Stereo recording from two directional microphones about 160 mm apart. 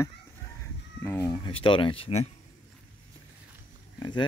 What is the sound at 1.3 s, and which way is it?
Speech, 30° left (ahead or behind).